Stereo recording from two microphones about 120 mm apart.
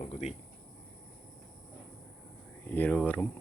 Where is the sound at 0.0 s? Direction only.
70° left (ahead or behind).